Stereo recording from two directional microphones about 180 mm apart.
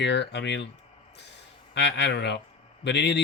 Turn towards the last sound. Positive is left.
turn(degrees=70)  # may be behind; listen again after turning